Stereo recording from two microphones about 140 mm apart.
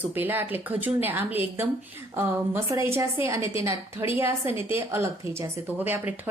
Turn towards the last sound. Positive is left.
turn(degrees=-15)  # may be behind; listen again after turning